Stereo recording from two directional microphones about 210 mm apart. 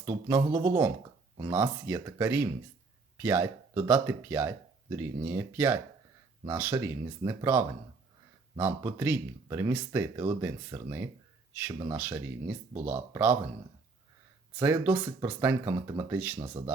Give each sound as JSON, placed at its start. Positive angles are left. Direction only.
{"t": 0.0, "sound": "speech", "side_deg": -10}
{"t": 14.6, "sound": "speech", "side_deg": -10}